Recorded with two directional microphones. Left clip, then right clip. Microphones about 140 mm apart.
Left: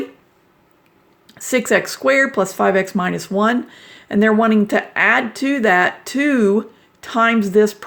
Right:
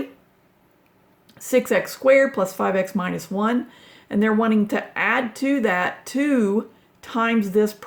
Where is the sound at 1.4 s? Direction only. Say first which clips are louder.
Left 3 dB; 40° left (ahead or behind).